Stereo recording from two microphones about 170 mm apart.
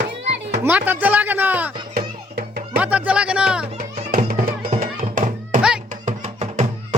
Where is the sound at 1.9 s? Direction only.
65° right (ahead or behind).